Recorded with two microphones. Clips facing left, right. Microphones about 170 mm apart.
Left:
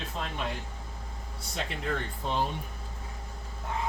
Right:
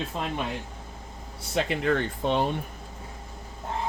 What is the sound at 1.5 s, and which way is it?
Speech, 75° right (ahead or behind).